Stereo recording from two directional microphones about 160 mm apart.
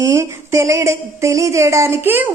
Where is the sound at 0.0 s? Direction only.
20° right (ahead or behind).